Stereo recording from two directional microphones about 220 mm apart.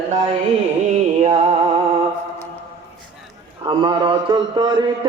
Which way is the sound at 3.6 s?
20° right (ahead or behind).